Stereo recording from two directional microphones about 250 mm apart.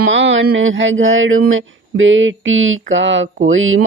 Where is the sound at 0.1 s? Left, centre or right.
Right.